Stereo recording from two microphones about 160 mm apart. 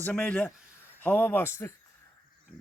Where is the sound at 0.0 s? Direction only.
10° left (ahead or behind).